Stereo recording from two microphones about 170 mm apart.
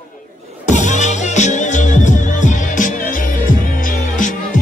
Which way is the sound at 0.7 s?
45° left (ahead or behind).